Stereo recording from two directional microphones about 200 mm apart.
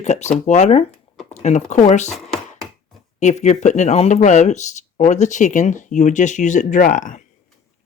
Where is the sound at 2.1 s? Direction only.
Centre (ahead or behind).